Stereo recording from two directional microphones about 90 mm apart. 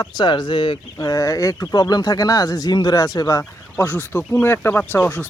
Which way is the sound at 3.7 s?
20° left (ahead or behind).